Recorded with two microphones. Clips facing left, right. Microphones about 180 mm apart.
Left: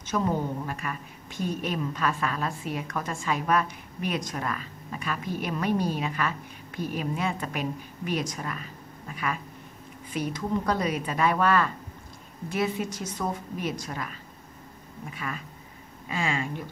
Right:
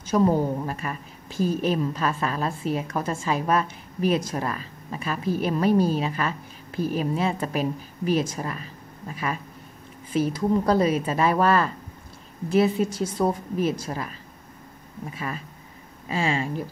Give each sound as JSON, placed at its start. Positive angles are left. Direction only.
{"t": 0.1, "sound": "a woman's voice", "side_deg": -35}
{"t": 15.1, "sound": "a woman's voice", "side_deg": -30}